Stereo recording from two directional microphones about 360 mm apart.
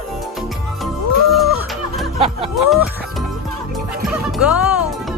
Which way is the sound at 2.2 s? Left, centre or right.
Centre.